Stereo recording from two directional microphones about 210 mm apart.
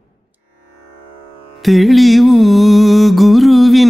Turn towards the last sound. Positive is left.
turn(degrees=0)  # may be behind; listen again after turning